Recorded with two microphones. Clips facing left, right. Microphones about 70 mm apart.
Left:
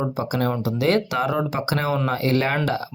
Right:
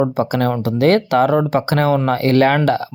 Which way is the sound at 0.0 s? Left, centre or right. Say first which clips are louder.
Right 7 dB; right.